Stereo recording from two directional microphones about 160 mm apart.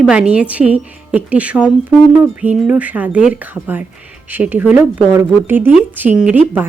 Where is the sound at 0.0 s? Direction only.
5° right (ahead or behind).